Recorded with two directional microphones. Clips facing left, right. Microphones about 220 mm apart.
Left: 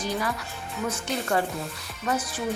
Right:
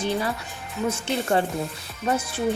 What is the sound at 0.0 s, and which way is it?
Music, 25° right (ahead or behind).